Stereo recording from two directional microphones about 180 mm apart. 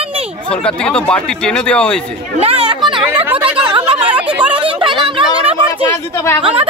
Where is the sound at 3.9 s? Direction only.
10° right (ahead or behind).